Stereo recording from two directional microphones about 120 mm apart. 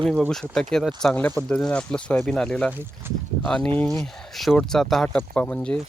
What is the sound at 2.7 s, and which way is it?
Speech, 20° right (ahead or behind).